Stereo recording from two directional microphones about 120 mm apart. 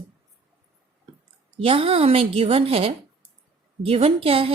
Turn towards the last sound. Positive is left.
turn(degrees=-50)  # may be behind; listen again after turning